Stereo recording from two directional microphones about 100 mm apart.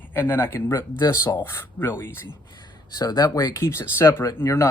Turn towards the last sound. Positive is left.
turn(degrees=30)  # may be behind; listen again after turning